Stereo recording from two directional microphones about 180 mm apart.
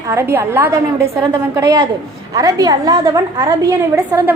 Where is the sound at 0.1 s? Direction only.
15° right (ahead or behind).